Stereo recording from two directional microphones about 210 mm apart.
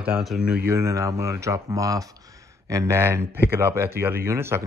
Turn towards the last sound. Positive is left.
turn(degrees=-10)  # may be behind; listen again after turning